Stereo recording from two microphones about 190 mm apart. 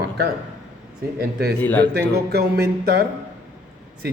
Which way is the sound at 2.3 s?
60° right (ahead or behind).